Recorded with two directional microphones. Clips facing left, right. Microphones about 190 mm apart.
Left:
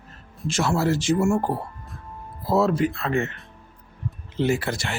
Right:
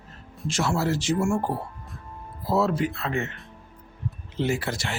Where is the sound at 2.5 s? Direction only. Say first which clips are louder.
Left 3 dB; 50° left (ahead or behind).